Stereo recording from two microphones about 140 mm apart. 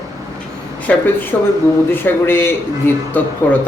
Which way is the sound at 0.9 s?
10° left (ahead or behind).